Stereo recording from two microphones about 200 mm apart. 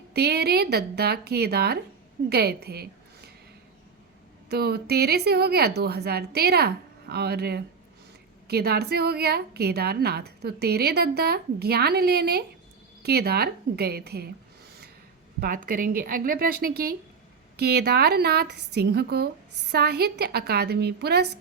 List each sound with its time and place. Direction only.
0.1 s a woman's voice: 55° right (ahead or behind)
4.4 s a woman's voice: 55° right (ahead or behind)
15.4 s a woman's voice: 45° right (ahead or behind)